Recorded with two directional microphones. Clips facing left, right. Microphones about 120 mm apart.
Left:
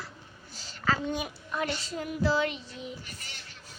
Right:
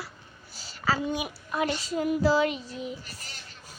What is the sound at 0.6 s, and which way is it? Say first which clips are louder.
A woman's voice: right 2 dB; 5° right (ahead or behind).